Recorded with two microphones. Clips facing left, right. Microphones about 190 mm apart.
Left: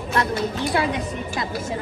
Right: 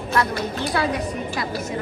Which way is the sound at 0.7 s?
25° left (ahead or behind).